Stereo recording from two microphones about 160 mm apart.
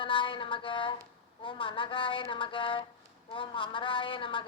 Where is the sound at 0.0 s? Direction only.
30° left (ahead or behind).